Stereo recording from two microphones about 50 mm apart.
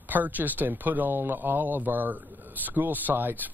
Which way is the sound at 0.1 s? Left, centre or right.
Right.